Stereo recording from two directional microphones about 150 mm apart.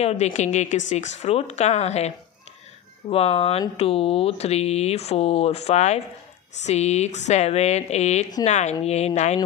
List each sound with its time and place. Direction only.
0.0 s speech: 50° left (ahead or behind)